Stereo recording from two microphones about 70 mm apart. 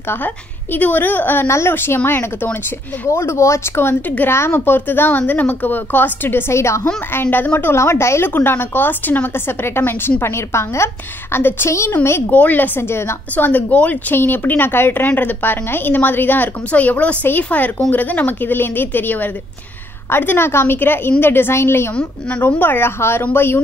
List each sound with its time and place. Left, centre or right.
0.7 s a woman's voice: left
3.1 s a woman's voice: left
7.2 s a woman's voice: left
12.4 s speech: left
13.5 s a woman's voice: left